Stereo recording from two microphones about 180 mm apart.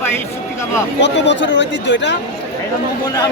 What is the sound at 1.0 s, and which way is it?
A man's voice, 80° left.